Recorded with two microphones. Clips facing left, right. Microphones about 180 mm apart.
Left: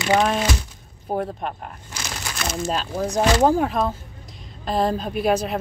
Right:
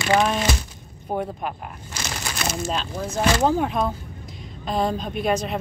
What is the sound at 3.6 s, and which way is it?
A woman's voice, centre (ahead or behind).